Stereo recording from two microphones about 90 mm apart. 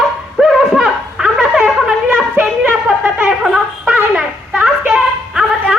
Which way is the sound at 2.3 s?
20° right (ahead or behind).